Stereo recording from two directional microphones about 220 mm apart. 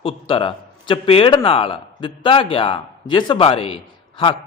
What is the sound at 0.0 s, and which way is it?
Speech, 25° left (ahead or behind).